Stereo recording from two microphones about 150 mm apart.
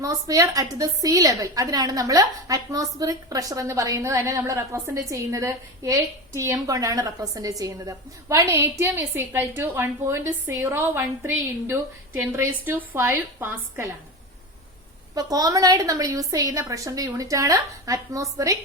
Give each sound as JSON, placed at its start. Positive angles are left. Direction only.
{"t": 0.0, "sound": "a woman's voice", "side_deg": -20}
{"t": 15.1, "sound": "a woman's voice", "side_deg": -25}